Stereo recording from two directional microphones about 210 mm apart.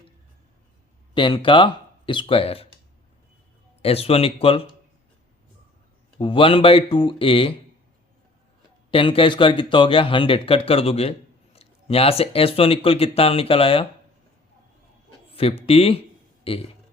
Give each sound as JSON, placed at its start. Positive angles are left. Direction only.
{"t": 1.1, "sound": "speech", "side_deg": 25}
{"t": 3.8, "sound": "speech", "side_deg": 30}
{"t": 6.1, "sound": "speech", "side_deg": 25}
{"t": 8.9, "sound": "speech", "side_deg": 25}
{"t": 15.3, "sound": "a man's voice", "side_deg": 25}